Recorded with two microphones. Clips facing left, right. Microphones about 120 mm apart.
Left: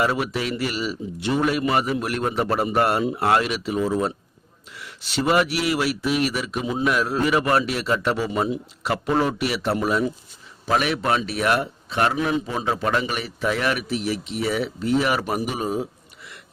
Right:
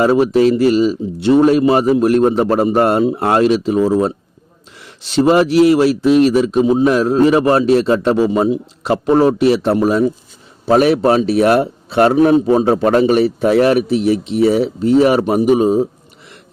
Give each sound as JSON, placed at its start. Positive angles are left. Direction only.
{"t": 0.0, "sound": "a man's voice", "side_deg": -35}
{"t": 8.3, "sound": "a man's voice", "side_deg": -25}
{"t": 15.2, "sound": "a man's voice", "side_deg": -25}